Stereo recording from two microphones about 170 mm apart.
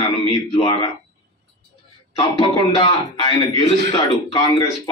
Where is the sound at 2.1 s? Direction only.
25° left (ahead or behind).